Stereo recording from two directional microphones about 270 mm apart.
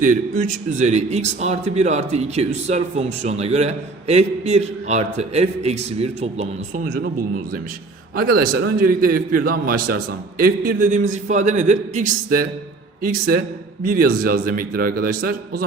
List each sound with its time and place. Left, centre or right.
0.0 s a man's voice: right
8.1 s a man's voice: right